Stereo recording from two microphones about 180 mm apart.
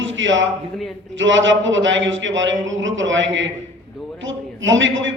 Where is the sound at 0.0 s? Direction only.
90° right.